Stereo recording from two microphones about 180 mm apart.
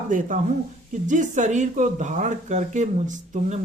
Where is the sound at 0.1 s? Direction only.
45° right (ahead or behind).